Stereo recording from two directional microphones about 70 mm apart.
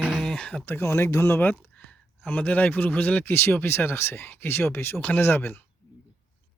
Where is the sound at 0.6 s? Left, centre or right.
Left.